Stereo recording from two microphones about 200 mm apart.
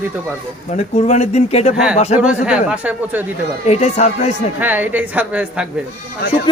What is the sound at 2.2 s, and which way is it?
Speech, 5° right (ahead or behind).